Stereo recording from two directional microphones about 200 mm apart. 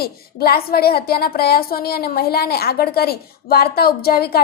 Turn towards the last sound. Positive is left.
turn(degrees=50)  # may be behind; listen again after turning